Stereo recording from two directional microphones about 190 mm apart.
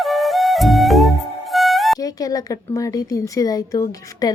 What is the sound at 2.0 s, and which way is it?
A woman's voice, 20° left (ahead or behind).